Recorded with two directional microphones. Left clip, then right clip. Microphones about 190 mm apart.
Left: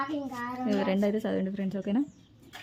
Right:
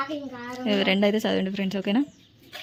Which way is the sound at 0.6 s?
10° right (ahead or behind).